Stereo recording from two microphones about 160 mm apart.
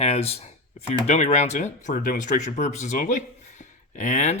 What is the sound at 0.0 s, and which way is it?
Speech, 40° left (ahead or behind).